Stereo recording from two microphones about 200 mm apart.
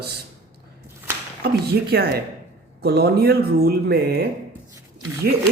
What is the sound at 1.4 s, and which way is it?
Speech, 50° right (ahead or behind).